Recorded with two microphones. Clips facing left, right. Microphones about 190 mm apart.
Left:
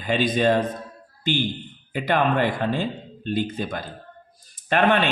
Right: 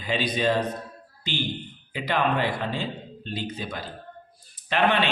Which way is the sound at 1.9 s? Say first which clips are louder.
Left 4 dB; 50° left (ahead or behind).